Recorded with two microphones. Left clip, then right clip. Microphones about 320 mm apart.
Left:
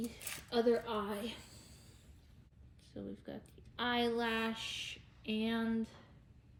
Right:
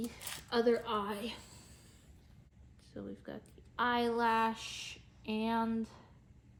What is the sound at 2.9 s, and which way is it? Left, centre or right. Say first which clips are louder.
Speech: right 1 dB; centre.